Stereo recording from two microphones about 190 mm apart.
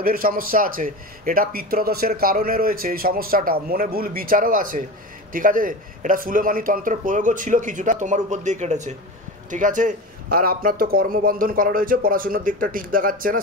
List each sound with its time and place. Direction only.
0.0 s a man's voice: 50° right (ahead or behind)